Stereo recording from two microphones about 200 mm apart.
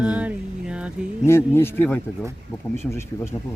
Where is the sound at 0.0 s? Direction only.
5° right (ahead or behind).